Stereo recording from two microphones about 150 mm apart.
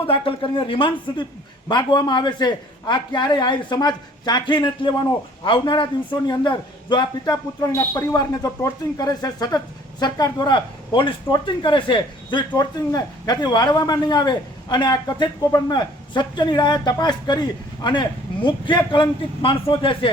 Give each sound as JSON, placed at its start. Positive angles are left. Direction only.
{"t": 0.0, "sound": "a man's voice", "side_deg": 35}